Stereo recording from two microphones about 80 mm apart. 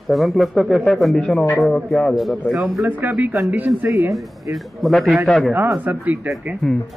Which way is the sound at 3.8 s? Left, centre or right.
Right.